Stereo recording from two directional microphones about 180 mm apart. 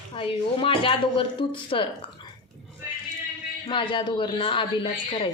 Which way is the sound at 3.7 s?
25° left (ahead or behind).